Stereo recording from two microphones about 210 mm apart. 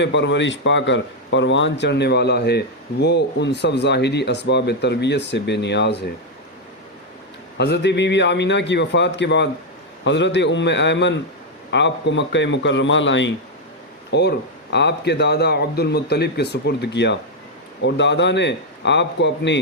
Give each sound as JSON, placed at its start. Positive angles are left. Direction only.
{"t": 0.0, "sound": "speech", "side_deg": 60}
{"t": 7.6, "sound": "speech", "side_deg": 55}